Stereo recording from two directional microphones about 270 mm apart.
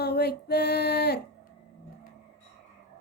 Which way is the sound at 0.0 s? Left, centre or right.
Left.